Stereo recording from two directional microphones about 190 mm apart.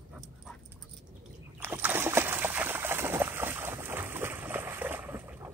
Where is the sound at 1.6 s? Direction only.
10° right (ahead or behind).